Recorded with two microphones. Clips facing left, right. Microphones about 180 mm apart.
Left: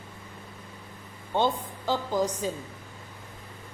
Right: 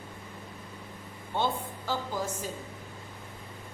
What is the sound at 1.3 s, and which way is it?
Speech, 20° left (ahead or behind).